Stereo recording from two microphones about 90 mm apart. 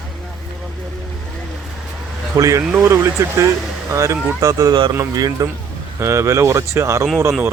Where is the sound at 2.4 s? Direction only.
35° right (ahead or behind).